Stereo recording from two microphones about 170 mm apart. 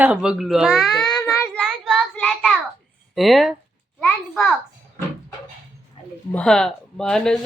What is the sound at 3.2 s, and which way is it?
Speech, centre (ahead or behind).